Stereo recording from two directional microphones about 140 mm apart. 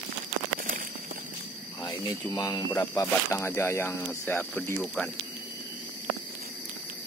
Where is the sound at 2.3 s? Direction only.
25° left (ahead or behind); by 4.6 s 5° left (ahead or behind).